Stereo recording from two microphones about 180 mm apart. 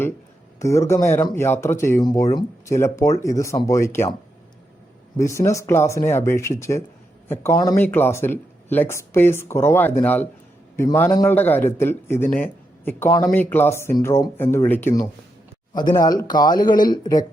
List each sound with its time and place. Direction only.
0.6 s speech: 15° left (ahead or behind)
5.1 s speech: 15° left (ahead or behind)
15.7 s speech: 20° left (ahead or behind)